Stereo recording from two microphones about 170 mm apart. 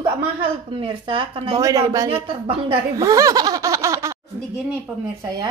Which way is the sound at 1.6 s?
20° right (ahead or behind).